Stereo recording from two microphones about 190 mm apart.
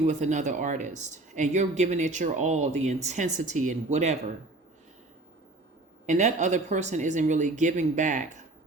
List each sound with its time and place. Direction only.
0.0 s speech: 40° right (ahead or behind)
6.1 s speech: 40° right (ahead or behind)